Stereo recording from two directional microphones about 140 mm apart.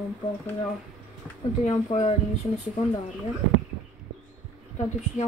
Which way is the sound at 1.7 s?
50° left (ahead or behind).